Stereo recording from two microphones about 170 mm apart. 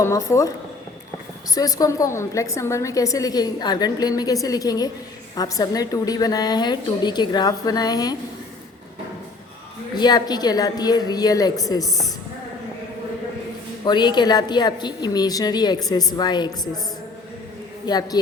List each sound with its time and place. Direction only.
0.0 s a woman's voice: 15° left (ahead or behind)
1.5 s a woman's voice: 20° left (ahead or behind)
9.9 s a woman's voice: 25° left (ahead or behind)
13.8 s a woman's voice: 25° left (ahead or behind)
17.8 s a woman's voice: 25° left (ahead or behind)